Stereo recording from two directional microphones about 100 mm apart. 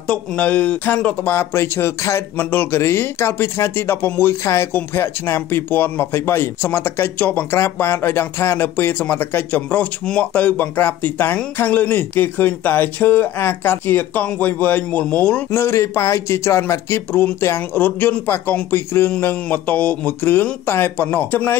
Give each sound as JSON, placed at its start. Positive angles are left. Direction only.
{"t": 0.1, "sound": "speech", "side_deg": 15}